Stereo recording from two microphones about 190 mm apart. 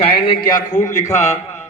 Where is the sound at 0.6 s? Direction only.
40° left (ahead or behind).